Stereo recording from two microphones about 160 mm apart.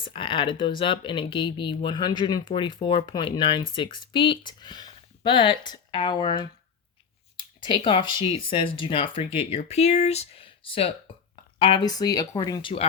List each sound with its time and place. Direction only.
0.0 s speech: 35° left (ahead or behind)